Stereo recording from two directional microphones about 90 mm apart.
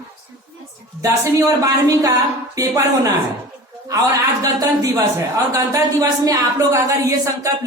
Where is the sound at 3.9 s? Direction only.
40° right (ahead or behind).